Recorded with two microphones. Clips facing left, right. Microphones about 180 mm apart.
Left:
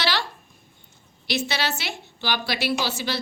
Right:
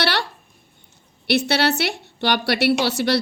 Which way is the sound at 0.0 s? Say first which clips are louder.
Right 4 dB; 65° right (ahead or behind).